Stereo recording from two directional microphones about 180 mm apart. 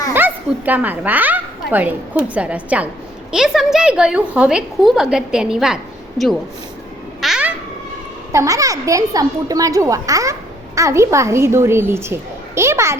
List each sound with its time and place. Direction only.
0.1 s a woman's voice: 10° right (ahead or behind)
7.2 s babbling: 5° right (ahead or behind)
8.3 s a woman's voice: 20° right (ahead or behind)